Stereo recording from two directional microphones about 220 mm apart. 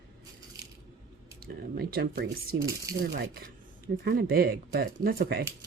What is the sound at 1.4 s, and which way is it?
Speech, 45° right (ahead or behind).